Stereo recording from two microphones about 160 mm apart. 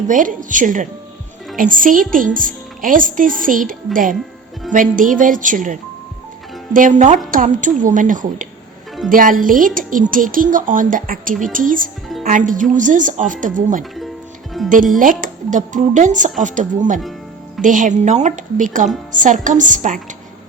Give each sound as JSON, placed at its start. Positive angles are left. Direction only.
{"t": 0.1, "sound": "a woman's voice", "side_deg": -55}
{"t": 14.5, "sound": "music", "side_deg": 0}
{"t": 14.9, "sound": "speech", "side_deg": -55}